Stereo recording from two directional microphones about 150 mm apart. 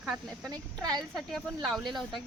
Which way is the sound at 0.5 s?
25° right (ahead or behind).